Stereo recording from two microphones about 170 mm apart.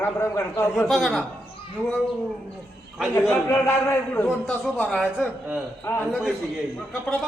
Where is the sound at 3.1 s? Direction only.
15° left (ahead or behind).